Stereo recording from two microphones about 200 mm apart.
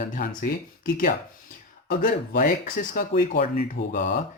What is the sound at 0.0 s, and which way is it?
Speech, 40° left (ahead or behind).